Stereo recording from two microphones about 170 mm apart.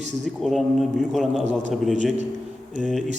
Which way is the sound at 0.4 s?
Centre (ahead or behind).